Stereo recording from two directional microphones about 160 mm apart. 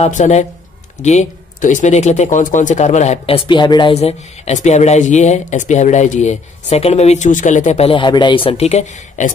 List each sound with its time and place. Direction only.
0.0 s speech: 45° left (ahead or behind)